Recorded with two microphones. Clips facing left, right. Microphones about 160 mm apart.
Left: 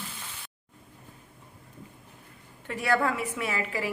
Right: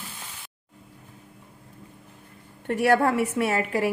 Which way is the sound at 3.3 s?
50° right (ahead or behind).